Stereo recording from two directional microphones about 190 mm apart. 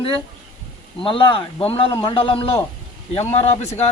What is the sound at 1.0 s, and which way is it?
A man's voice, 25° left (ahead or behind).